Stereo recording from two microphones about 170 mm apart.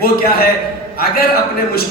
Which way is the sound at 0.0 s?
65° left (ahead or behind).